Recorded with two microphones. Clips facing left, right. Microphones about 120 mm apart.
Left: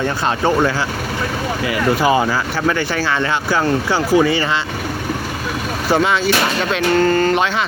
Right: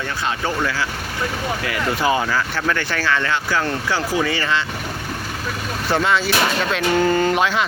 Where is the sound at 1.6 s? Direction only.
15° left (ahead or behind).